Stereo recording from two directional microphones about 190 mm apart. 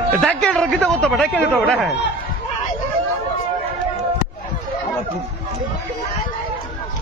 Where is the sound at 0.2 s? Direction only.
5° left (ahead or behind).